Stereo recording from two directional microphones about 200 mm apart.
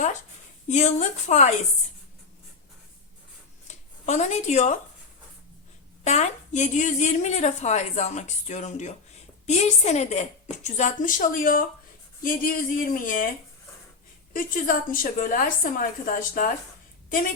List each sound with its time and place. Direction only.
0.7 s a woman's voice: 35° left (ahead or behind)
3.7 s speech: 35° left (ahead or behind)
6.1 s a woman's voice: 35° left (ahead or behind)
14.3 s a woman's voice: 45° left (ahead or behind)